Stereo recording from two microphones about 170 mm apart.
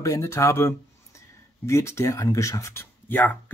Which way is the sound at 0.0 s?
20° left (ahead or behind).